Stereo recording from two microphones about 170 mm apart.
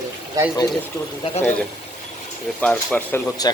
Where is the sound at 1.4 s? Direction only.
10° left (ahead or behind).